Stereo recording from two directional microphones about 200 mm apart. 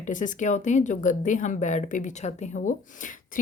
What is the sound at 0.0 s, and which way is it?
Speech, 40° left (ahead or behind).